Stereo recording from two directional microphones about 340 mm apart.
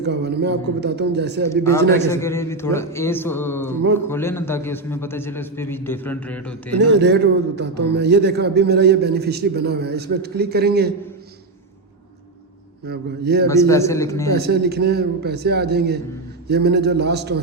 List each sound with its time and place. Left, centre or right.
0.0 s a man's voice: right
1.5 s a man's voice: centre
6.7 s a man's voice: right
12.9 s a man's voice: right
13.5 s a man's voice: centre
14.3 s a man's voice: right